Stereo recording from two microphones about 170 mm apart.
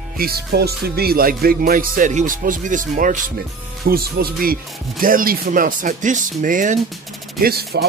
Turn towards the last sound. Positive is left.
turn(degrees=-70)  # may be behind; listen again after turning